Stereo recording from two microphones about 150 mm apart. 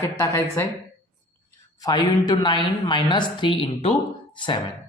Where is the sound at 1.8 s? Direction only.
25° left (ahead or behind).